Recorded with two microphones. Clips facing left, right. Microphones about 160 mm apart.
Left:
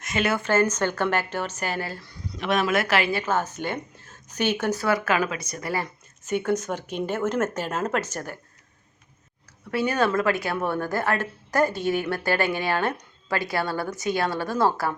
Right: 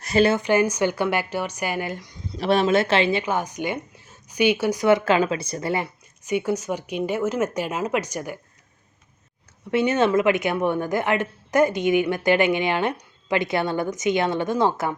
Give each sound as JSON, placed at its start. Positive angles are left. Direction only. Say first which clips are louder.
{"t": 0.0, "sound": "speech", "louder": "right 7 dB", "side_deg": -35}
{"t": 0.3, "sound": "a woman's voice", "louder": "right 2 dB", "side_deg": -15}
{"t": 5.8, "sound": "speech", "louder": "right 2 dB", "side_deg": -10}
{"t": 9.7, "sound": "a woman's voice", "louder": "right 4 dB", "side_deg": -20}